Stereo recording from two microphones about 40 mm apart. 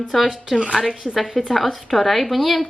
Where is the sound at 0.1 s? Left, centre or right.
Centre.